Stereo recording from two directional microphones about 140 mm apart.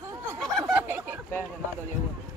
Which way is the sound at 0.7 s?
15° right (ahead or behind).